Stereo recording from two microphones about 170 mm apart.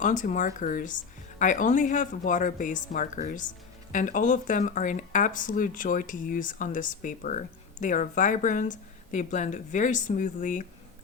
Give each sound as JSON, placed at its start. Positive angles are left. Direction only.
{"t": 0.0, "sound": "speech", "side_deg": 50}